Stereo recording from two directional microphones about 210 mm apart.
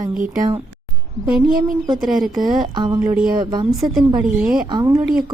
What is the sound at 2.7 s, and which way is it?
Speech, 20° right (ahead or behind).